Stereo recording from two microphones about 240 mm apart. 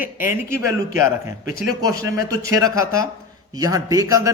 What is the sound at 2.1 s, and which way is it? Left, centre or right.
A man's voice, centre.